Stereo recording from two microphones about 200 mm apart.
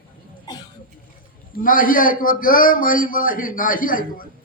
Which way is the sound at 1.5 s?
45° left (ahead or behind).